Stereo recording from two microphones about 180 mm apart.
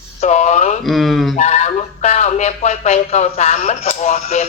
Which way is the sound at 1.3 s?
40° left (ahead or behind).